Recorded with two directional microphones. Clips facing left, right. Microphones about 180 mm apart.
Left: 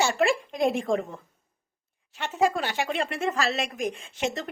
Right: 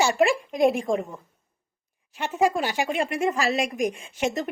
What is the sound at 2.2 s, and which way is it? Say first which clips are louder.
Speech: right 2 dB; 20° right (ahead or behind).